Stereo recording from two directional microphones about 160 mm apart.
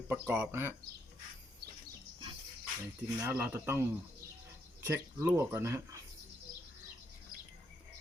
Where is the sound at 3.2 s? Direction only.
15° right (ahead or behind).